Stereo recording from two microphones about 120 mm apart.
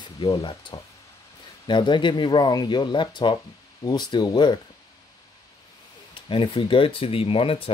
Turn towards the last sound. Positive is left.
turn(degrees=50)  # may be behind; listen again after turning